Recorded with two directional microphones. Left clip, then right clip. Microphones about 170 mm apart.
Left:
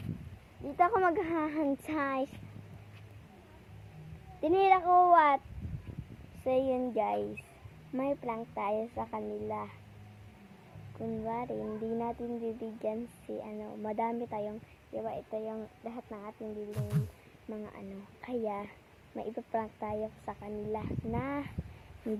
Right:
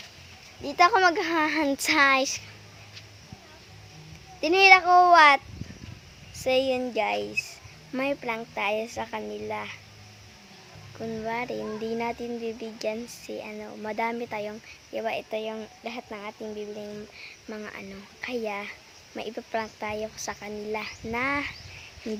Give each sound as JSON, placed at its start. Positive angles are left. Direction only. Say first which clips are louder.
{"t": 0.6, "sound": "speech", "louder": "right 8 dB", "side_deg": -30}
{"t": 0.9, "sound": "speech", "louder": "right 7 dB", "side_deg": -15}
{"t": 4.4, "sound": "speech", "louder": "right 9 dB", "side_deg": -15}
{"t": 6.5, "sound": "speech", "louder": "right 6 dB", "side_deg": -10}
{"t": 10.9, "sound": "speech", "louder": "right 5 dB", "side_deg": -25}
{"t": 14.9, "sound": "speech", "louder": "right 7 dB", "side_deg": -40}
{"t": 17.5, "sound": "speech", "louder": "right 5 dB", "side_deg": -25}
{"t": 18.2, "sound": "speech", "louder": "right 5 dB", "side_deg": -15}